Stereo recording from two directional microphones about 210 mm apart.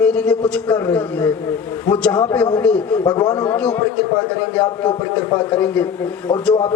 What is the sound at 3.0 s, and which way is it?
Speech, 20° left (ahead or behind).